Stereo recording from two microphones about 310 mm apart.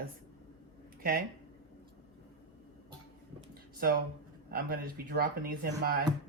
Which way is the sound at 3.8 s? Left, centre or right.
Right.